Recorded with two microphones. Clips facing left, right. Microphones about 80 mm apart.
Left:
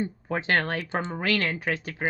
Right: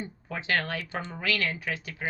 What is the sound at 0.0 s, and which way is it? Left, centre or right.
Speech, left.